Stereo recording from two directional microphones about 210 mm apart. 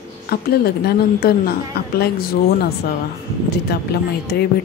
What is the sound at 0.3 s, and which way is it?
A woman's voice, 50° left (ahead or behind).